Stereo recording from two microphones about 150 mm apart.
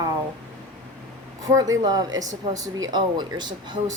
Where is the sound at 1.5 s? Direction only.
25° right (ahead or behind).